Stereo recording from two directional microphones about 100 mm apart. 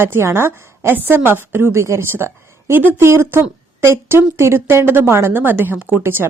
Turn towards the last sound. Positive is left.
turn(degrees=-20)  # may be behind; listen again after turning